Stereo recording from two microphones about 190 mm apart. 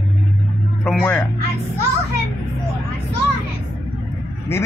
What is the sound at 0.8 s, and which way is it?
Speech, 10° left (ahead or behind).